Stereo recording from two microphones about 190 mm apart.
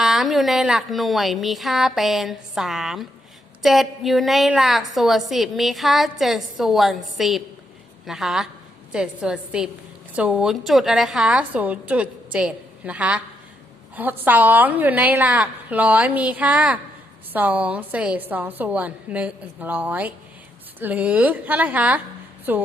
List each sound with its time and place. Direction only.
0.0 s a woman's voice: centre (ahead or behind)